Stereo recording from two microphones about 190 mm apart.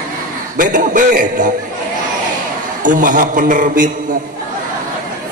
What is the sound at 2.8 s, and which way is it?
A man's voice, 45° right (ahead or behind).